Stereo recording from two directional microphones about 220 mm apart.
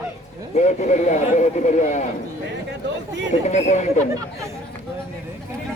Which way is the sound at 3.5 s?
30° left (ahead or behind).